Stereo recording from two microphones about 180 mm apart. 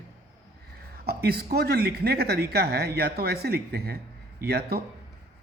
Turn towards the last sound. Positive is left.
turn(degrees=-60)  # may be behind; listen again after turning